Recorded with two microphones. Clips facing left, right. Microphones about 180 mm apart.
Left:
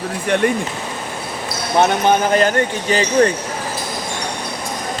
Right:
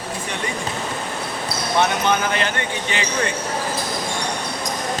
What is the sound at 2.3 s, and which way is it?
Speech, 40° left (ahead or behind).